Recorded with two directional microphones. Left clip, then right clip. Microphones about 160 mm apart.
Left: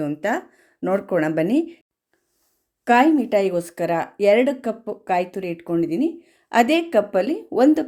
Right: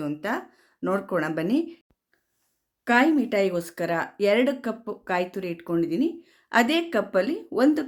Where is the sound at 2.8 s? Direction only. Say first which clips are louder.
Left 5 dB; 20° left (ahead or behind).